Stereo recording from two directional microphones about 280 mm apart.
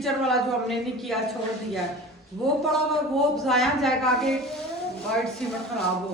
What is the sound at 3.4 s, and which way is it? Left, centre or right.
Speech, centre.